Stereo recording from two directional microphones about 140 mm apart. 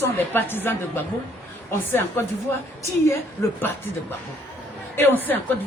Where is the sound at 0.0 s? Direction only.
15° left (ahead or behind).